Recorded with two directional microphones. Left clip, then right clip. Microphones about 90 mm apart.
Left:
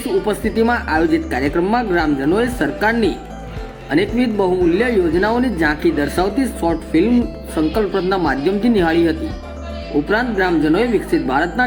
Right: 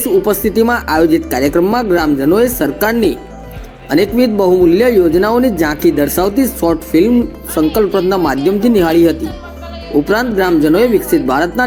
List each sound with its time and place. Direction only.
0.3 s speech: 20° right (ahead or behind)